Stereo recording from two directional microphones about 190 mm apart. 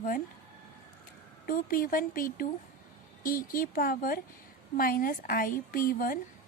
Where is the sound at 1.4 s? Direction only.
45° left (ahead or behind).